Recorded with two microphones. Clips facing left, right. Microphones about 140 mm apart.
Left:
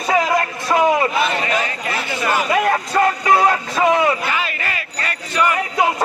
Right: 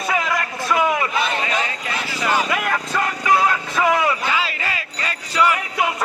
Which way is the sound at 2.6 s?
35° left (ahead or behind).